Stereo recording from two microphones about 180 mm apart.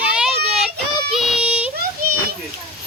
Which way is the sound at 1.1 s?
Centre (ahead or behind).